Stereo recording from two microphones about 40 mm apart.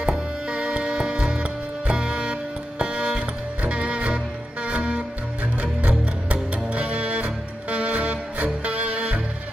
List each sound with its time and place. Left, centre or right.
0.5 s music: right